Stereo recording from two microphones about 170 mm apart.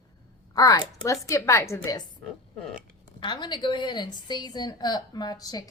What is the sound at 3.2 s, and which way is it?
A woman's voice, 25° left (ahead or behind).